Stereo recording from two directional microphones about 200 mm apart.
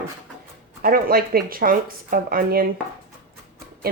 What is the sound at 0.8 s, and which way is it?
Speech, 45° right (ahead or behind).